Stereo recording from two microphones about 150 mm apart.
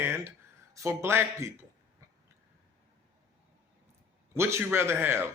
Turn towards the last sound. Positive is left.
turn(degrees=-15)  # may be behind; listen again after turning